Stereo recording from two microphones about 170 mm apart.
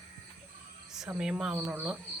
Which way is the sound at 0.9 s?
5° right (ahead or behind).